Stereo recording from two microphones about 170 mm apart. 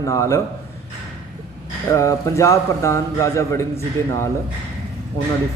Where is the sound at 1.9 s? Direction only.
20° left (ahead or behind).